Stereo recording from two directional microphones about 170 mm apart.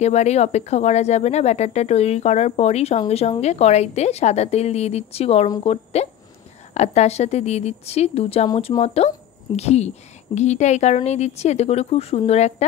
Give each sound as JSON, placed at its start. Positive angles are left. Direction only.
{"t": 0.0, "sound": "a woman's voice", "side_deg": 40}